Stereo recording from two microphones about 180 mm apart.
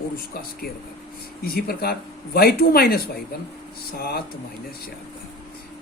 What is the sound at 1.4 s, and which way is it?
Speech, 55° left (ahead or behind).